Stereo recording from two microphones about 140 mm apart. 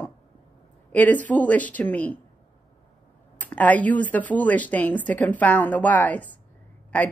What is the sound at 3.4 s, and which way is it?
A woman's voice, 10° left (ahead or behind).